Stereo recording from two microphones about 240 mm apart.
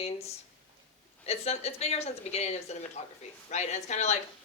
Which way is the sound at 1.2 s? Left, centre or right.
Left.